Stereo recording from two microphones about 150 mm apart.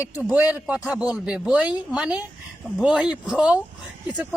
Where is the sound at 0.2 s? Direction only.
10° right (ahead or behind).